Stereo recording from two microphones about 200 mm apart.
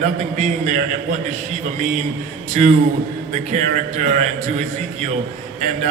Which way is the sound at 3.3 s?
35° right (ahead or behind).